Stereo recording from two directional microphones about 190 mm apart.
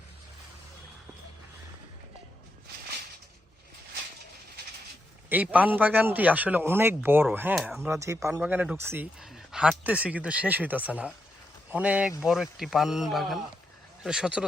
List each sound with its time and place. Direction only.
5.3 s a man's voice: 10° right (ahead or behind)
7.9 s a man's voice: 15° right (ahead or behind)